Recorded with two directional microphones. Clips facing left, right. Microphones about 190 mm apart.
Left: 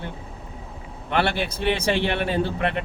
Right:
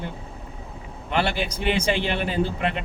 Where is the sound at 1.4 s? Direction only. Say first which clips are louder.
Even; 20° right (ahead or behind).